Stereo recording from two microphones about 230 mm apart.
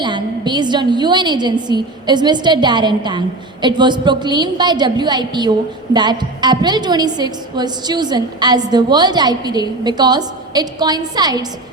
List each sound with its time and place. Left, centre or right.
0.0 s a woman's voice: centre